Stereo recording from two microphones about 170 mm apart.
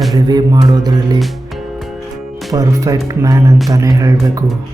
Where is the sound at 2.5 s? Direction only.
20° right (ahead or behind).